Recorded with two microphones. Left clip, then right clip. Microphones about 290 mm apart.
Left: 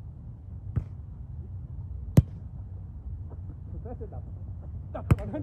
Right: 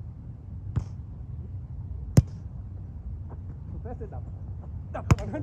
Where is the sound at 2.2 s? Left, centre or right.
Right.